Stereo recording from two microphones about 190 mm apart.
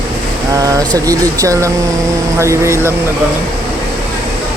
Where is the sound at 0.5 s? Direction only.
15° right (ahead or behind).